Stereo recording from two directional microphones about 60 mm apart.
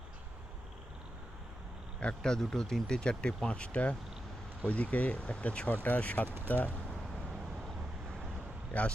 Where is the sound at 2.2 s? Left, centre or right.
Centre; by 6.7 s left.